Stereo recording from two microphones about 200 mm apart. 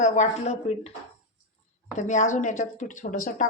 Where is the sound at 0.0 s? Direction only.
35° left (ahead or behind).